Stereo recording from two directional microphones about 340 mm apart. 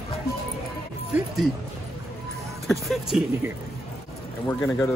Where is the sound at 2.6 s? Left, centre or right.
Centre.